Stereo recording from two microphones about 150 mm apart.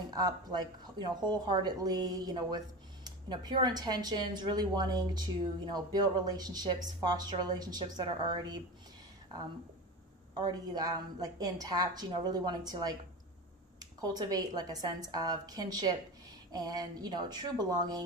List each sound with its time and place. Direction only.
0.1 s speech: 25° right (ahead or behind)
10.3 s speech: 30° right (ahead or behind)